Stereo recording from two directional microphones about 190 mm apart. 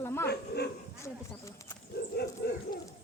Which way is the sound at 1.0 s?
15° left (ahead or behind).